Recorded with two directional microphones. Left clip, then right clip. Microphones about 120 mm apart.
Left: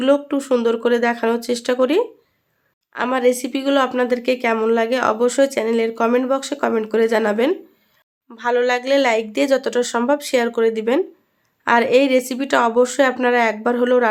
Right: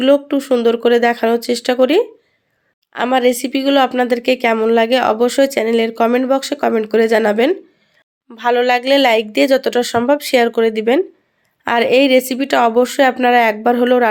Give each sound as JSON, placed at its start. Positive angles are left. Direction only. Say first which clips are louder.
{"t": 0.0, "sound": "speech", "louder": "right 4 dB", "side_deg": -20}